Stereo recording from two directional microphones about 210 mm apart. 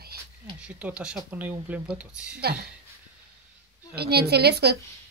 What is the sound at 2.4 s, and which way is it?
Speech, 50° right (ahead or behind).